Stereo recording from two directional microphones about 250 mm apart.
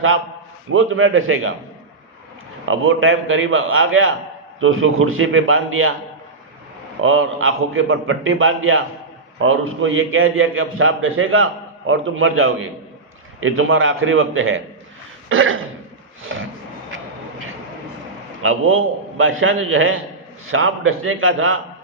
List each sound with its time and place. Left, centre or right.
0.7 s a man's voice: right
2.6 s a man's voice: right
7.0 s a man's voice: right
18.4 s a man's voice: right